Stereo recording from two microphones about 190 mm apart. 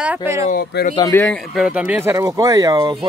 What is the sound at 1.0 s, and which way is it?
Speech, 10° left (ahead or behind).